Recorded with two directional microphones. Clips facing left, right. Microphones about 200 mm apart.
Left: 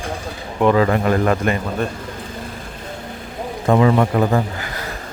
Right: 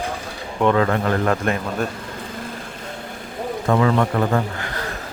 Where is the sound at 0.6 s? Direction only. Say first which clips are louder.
Left 3 dB; 5° left (ahead or behind).